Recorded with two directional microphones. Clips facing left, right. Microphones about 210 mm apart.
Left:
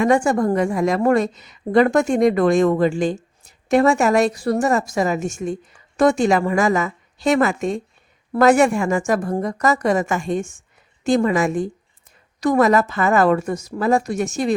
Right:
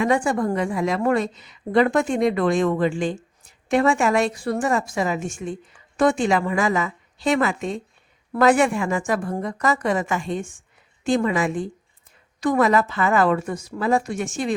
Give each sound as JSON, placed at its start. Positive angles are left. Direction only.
{"t": 0.0, "sound": "a woman's voice", "side_deg": 45}